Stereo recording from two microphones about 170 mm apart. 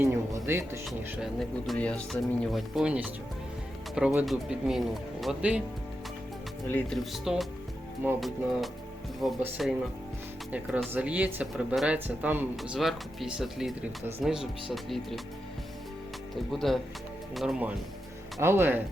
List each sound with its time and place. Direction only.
0.0 s speech: 15° right (ahead or behind)
0.9 s speech: centre (ahead or behind)
6.7 s speech: 10° left (ahead or behind)
7.0 s speech: centre (ahead or behind)
16.3 s speech: centre (ahead or behind)